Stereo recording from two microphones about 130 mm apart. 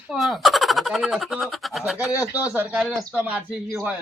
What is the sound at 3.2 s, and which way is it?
Speech, 10° right (ahead or behind).